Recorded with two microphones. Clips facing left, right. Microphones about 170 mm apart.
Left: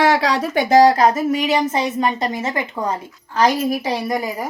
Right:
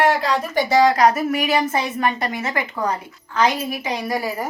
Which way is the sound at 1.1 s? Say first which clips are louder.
Left 2 dB; 20° left (ahead or behind).